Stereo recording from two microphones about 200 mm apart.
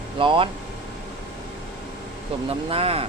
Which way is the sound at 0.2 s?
25° right (ahead or behind).